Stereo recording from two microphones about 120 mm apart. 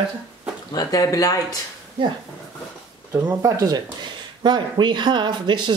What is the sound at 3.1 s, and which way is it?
Speech, 30° right (ahead or behind).